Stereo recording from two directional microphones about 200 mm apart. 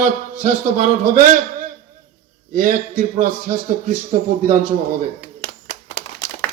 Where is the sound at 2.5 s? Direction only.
45° right (ahead or behind).